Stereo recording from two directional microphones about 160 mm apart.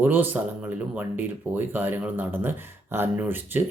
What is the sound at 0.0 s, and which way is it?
Speech, 10° right (ahead or behind).